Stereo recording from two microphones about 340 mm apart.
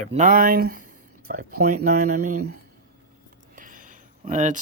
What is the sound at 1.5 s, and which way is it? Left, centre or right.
Speech, right.